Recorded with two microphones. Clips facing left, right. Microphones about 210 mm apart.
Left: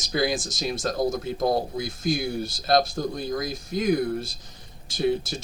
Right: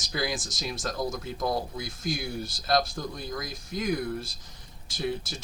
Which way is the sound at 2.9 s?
40° left (ahead or behind).